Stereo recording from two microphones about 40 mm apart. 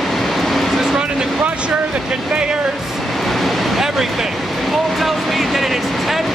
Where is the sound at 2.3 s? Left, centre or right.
Right.